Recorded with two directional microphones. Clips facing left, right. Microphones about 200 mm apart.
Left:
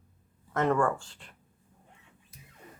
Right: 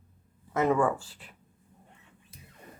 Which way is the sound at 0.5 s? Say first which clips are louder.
Right 1 dB; 5° right (ahead or behind).